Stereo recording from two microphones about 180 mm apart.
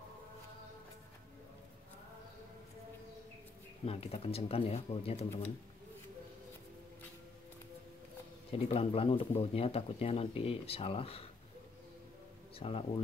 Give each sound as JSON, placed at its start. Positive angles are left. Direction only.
{"t": 3.8, "sound": "speech", "side_deg": 35}
{"t": 8.5, "sound": "speech", "side_deg": 30}
{"t": 12.5, "sound": "speech", "side_deg": 30}